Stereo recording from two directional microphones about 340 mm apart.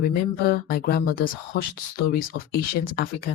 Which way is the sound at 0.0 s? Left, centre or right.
Left.